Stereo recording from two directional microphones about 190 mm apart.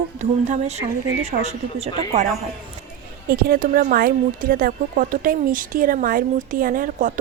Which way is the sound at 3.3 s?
50° right (ahead or behind).